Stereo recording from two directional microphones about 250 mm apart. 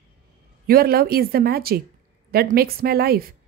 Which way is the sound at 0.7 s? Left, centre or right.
Right.